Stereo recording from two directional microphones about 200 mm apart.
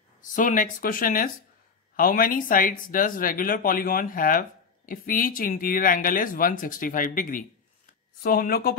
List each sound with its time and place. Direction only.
0.2 s speech: 40° left (ahead or behind)